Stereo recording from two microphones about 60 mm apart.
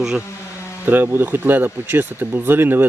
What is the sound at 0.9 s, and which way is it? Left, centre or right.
Speech, right.